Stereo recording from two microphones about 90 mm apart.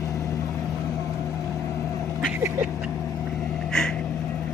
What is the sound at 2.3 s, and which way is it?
Vehicle, 25° right (ahead or behind).